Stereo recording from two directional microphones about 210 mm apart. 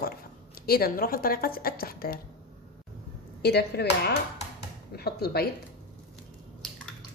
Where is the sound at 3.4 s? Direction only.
50° left (ahead or behind).